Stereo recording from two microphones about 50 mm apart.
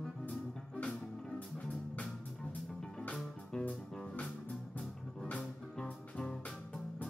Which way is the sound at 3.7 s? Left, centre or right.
Left.